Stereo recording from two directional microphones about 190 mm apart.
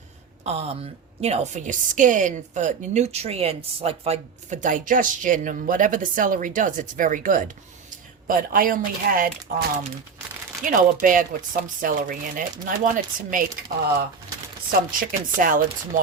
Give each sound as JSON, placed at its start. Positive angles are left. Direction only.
{"t": 0.4, "sound": "a woman's voice", "side_deg": -35}
{"t": 14.7, "sound": "a woman's voice", "side_deg": -45}